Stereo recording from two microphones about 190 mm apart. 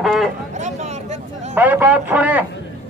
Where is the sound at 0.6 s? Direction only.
35° right (ahead or behind).